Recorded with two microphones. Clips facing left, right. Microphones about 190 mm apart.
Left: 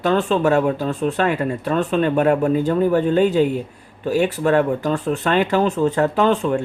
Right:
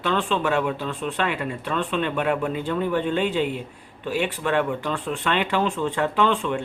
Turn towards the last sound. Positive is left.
turn(degrees=40)  # may be behind; listen again after turning